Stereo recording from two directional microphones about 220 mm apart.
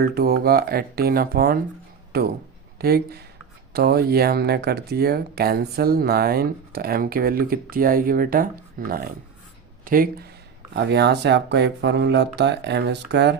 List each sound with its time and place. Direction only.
0.0 s speech: 45° right (ahead or behind)